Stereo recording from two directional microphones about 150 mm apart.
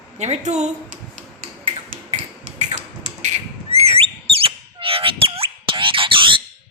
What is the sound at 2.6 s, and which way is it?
Beatboxing, 50° right (ahead or behind).